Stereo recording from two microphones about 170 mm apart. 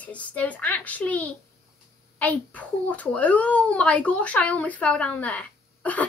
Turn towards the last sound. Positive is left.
turn(degrees=10)  # may be behind; listen again after turning